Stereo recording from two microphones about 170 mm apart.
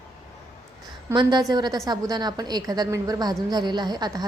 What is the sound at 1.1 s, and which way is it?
A woman's voice, 25° right (ahead or behind).